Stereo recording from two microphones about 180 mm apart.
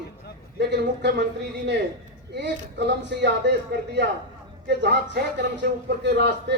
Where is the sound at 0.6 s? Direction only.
70° right (ahead or behind).